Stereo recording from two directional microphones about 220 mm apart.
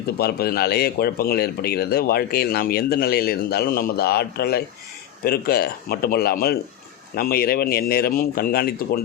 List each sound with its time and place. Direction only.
0.2 s speech: 45° left (ahead or behind)